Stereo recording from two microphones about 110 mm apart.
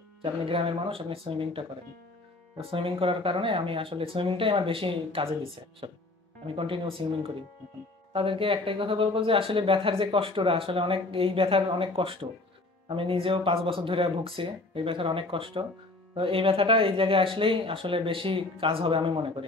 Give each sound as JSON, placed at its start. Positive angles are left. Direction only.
{"t": 0.2, "sound": "speech", "side_deg": -55}